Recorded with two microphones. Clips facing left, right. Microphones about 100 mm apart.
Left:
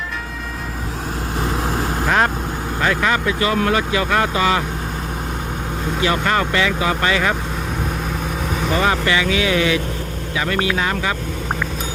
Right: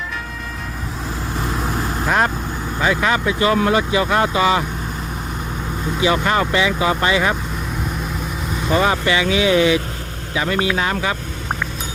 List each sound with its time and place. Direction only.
1.4 s vehicle: 55° left (ahead or behind)
2.0 s vehicle: 5° right (ahead or behind)
2.8 s speech: 15° right (ahead or behind)
6.0 s speech: 15° right (ahead or behind)
8.7 s speech: 20° right (ahead or behind)